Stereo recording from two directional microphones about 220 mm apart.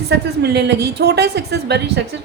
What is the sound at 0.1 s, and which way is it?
A woman's voice, 50° right (ahead or behind).